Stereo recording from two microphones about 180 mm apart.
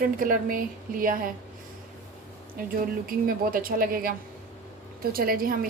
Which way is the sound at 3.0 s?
50° right (ahead or behind).